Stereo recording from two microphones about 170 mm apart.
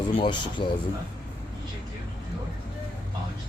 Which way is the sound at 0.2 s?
25° left (ahead or behind).